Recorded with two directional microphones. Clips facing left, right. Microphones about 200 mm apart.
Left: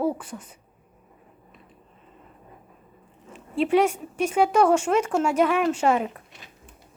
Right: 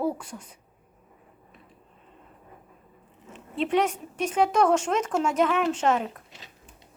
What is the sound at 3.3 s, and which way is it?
A woman's voice, 10° left (ahead or behind).